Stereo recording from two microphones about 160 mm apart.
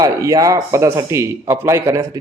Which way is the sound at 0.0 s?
20° right (ahead or behind).